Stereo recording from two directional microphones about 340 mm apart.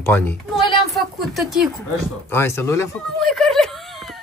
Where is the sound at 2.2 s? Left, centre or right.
Centre.